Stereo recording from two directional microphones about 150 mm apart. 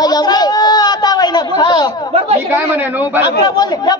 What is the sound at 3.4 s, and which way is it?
Speech, 25° left (ahead or behind).